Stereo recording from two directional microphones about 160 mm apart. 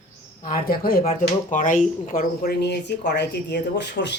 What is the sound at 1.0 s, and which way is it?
Speech, 45° left (ahead or behind).